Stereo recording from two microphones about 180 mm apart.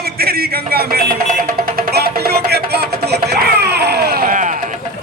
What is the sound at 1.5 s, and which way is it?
Music, 55° right (ahead or behind).